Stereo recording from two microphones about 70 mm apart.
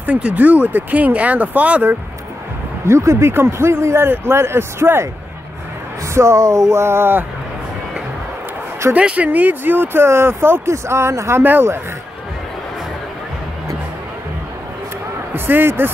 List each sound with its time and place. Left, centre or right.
0.0 s speech: right
2.9 s speech: right
6.1 s speech: right
8.9 s speech: right
15.3 s speech: right